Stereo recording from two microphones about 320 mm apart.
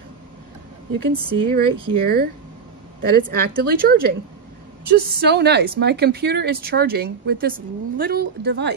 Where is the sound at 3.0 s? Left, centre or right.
Right.